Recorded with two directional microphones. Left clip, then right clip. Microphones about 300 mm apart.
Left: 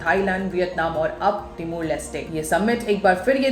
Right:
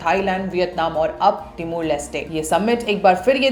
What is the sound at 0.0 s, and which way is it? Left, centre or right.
A woman's voice, centre.